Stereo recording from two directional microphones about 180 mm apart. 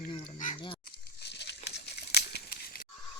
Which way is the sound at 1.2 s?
70° left (ahead or behind).